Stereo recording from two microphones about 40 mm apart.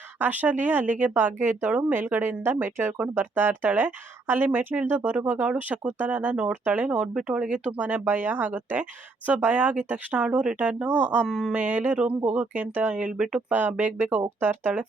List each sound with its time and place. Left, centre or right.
0.2 s speech: right
1.1 s a woman's voice: right
2.0 s a woman's voice: right
6.8 s speech: centre
7.3 s speech: right
11.3 s speech: centre
11.5 s speech: right
13.5 s speech: right